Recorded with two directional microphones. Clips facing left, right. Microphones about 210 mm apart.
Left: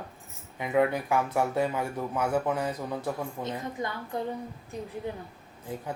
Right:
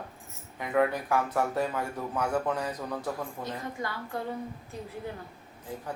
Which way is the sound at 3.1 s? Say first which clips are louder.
Left 2 dB; 20° left (ahead or behind).